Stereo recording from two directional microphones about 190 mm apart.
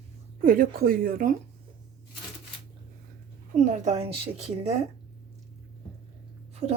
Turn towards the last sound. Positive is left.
turn(degrees=-35)  # may be behind; listen again after turning